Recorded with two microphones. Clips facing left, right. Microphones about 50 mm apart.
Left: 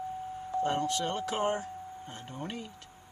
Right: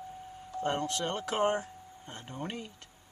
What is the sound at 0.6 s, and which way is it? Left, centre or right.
Speech, centre.